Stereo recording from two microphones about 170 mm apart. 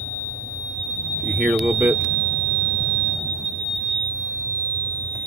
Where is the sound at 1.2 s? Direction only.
5° right (ahead or behind).